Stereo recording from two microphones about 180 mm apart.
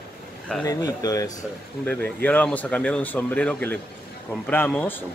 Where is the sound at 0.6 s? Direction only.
20° left (ahead or behind).